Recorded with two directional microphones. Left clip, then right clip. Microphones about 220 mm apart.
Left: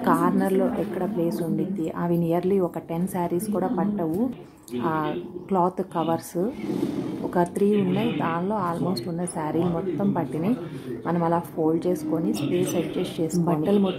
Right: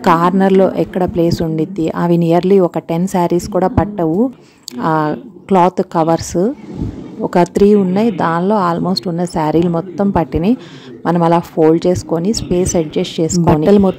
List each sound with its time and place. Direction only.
0.0 s a woman's voice: 45° right (ahead or behind)